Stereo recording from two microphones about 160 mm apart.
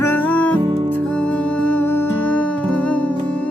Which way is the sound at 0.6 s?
35° right (ahead or behind).